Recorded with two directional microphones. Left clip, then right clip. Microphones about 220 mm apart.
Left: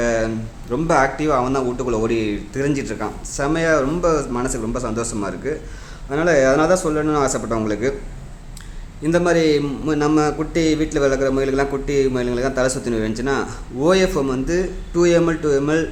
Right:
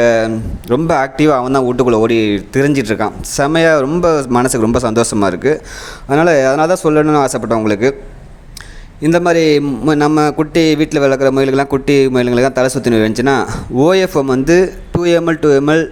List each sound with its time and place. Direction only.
0.0 s a man's voice: 35° right (ahead or behind)
9.0 s a man's voice: 35° right (ahead or behind)